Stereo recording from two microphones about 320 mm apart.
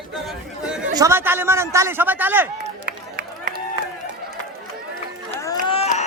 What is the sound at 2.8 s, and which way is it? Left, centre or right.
Run, right.